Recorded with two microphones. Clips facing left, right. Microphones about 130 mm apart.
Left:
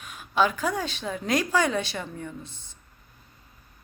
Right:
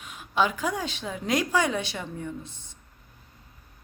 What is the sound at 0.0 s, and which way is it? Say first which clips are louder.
A woman's voice: left 2 dB; 20° right (ahead or behind).